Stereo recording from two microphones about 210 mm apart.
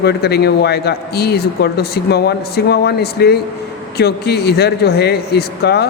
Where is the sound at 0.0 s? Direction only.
50° left (ahead or behind).